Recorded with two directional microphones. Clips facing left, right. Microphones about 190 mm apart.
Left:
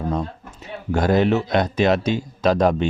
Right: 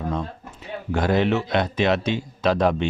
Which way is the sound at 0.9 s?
40° left (ahead or behind).